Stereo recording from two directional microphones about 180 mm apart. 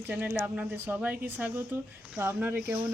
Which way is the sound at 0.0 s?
10° right (ahead or behind).